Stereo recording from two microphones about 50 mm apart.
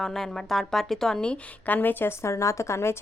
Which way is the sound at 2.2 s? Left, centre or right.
Left.